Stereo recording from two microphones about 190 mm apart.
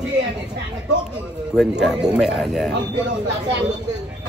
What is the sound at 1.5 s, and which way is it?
Speech, 5° right (ahead or behind).